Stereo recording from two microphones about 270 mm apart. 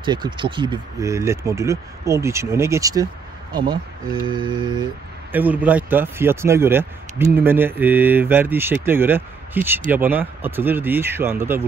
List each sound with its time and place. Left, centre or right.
0.0 s speech: centre
5.3 s speech: centre